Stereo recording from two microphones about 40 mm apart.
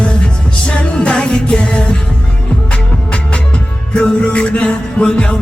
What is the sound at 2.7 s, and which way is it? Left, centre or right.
Music, left.